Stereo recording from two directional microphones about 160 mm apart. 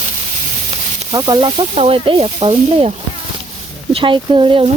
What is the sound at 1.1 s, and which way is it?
Speech, 25° right (ahead or behind).